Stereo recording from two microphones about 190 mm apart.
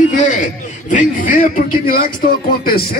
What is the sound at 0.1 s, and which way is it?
A man's voice, 40° left (ahead or behind).